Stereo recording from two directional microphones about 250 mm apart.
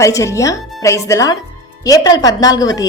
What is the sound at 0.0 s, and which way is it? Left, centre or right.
A woman's voice, centre.